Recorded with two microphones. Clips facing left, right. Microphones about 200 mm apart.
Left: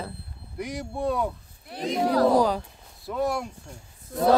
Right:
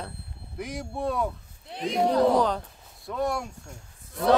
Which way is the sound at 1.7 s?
25° right (ahead or behind).